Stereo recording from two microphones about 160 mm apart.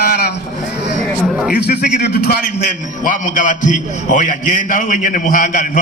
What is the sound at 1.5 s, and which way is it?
Speech, 80° left.